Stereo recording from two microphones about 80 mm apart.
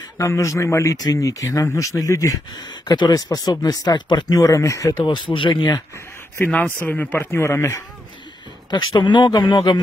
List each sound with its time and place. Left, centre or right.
0.2 s speech: left
0.9 s speech: left
2.7 s speech: left
4.4 s speech: left
5.0 s speech: left
6.4 s speech: centre; by 7.8 s left
8.6 s speech: left